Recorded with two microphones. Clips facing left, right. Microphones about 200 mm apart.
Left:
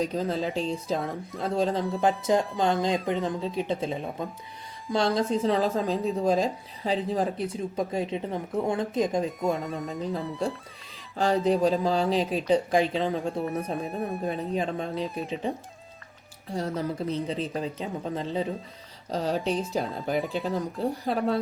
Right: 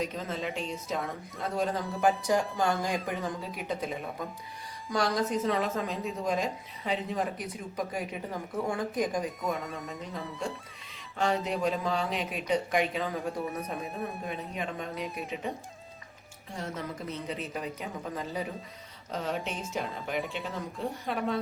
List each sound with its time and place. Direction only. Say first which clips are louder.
0.0 s a woman's voice: left 6 dB; 35° left (ahead or behind)
9.6 s speech: left 6 dB; centre (ahead or behind)
11.4 s speech: left 7 dB; 35° left (ahead or behind)
13.8 s speech: left 6 dB; centre (ahead or behind)
14.3 s a woman's voice: left 7 dB; 35° left (ahead or behind)